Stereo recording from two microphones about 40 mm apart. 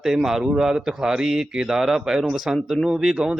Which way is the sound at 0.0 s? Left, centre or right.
Centre.